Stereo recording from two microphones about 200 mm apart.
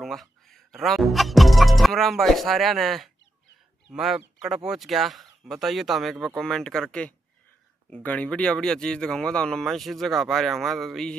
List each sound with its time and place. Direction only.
0.0 s speech: centre (ahead or behind)